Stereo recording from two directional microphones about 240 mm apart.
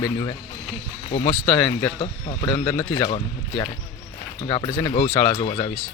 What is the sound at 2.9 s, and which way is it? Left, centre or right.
Speech, left.